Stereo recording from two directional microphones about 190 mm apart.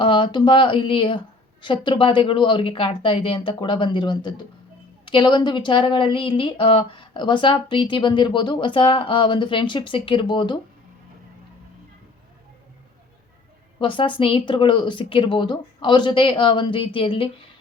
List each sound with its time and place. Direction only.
0.0 s speech: 25° left (ahead or behind)
13.7 s speech: 25° left (ahead or behind)